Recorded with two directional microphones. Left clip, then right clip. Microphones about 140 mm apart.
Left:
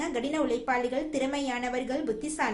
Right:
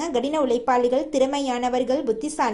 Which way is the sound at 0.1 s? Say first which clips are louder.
Right 10 dB; 35° right (ahead or behind).